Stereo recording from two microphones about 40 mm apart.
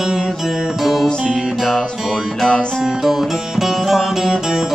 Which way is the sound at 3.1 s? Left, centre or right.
Centre.